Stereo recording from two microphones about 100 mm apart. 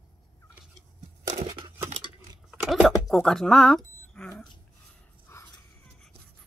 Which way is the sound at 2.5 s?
5° right (ahead or behind).